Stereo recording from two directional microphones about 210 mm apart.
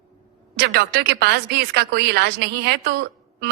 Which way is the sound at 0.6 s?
50° right (ahead or behind).